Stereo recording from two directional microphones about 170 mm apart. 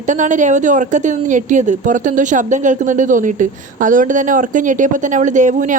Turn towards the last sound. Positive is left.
turn(degrees=-50)  # may be behind; listen again after turning